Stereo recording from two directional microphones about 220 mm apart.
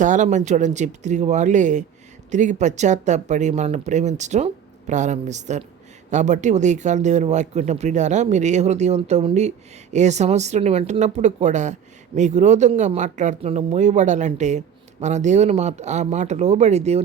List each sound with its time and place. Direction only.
0.0 s speech: 35° right (ahead or behind)